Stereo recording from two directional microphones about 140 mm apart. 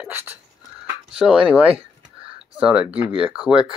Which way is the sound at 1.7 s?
40° right (ahead or behind).